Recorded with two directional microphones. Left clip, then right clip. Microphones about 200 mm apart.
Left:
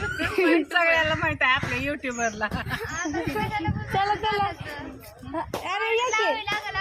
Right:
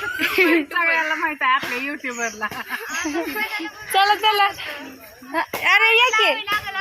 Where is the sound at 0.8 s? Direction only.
35° left (ahead or behind).